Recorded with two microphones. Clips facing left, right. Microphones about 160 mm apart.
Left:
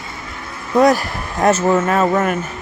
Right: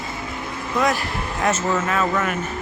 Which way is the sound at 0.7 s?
35° left (ahead or behind).